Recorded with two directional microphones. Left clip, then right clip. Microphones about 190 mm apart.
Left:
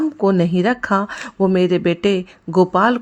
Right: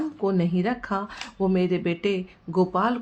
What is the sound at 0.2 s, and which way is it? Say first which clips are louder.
Speech: left 8 dB; 45° left (ahead or behind).